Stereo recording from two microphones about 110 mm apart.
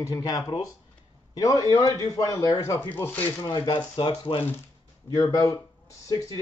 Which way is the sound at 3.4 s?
40° left (ahead or behind).